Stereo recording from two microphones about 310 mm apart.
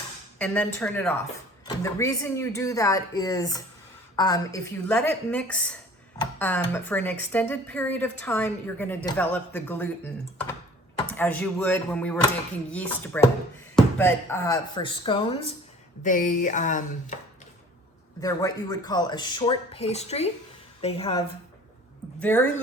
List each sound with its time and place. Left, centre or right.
0.3 s a woman's voice: centre
11.1 s a woman's voice: centre; by 17.2 s left
18.2 s speech: centre
22.2 s a woman's voice: centre